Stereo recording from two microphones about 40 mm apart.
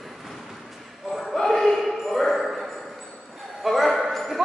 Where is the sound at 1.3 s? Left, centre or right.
Centre.